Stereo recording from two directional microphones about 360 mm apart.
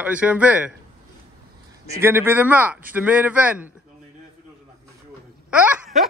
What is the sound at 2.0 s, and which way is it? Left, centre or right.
A man's voice, centre.